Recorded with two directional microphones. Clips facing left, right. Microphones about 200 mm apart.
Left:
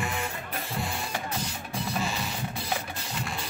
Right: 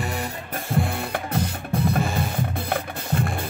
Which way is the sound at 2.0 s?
55° right (ahead or behind).